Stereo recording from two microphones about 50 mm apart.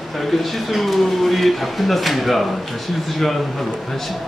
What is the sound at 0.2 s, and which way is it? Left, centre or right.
Speech, centre.